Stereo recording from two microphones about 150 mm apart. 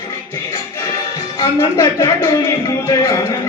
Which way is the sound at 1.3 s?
25° left (ahead or behind).